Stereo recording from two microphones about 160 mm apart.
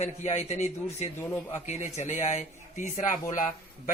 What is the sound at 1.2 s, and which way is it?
Speech, 15° left (ahead or behind).